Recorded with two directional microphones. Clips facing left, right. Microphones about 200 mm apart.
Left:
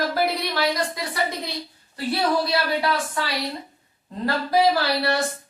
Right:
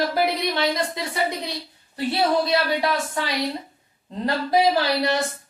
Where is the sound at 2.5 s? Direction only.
20° right (ahead or behind).